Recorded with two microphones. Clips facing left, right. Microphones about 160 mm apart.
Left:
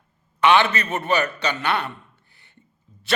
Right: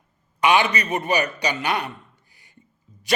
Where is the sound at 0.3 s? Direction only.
10° right (ahead or behind).